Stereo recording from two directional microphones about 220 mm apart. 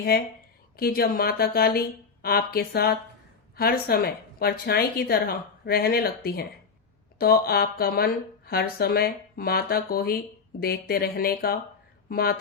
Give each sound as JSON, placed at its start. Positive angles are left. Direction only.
{"t": 0.1, "sound": "speech", "side_deg": 45}